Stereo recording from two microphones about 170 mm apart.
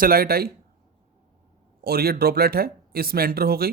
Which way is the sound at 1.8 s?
65° right (ahead or behind).